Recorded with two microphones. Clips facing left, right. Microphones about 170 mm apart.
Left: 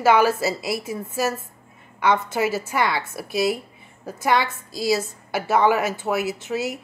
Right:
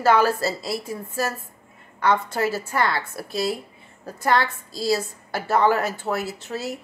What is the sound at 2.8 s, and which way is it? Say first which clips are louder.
Speech: even; 15° left (ahead or behind).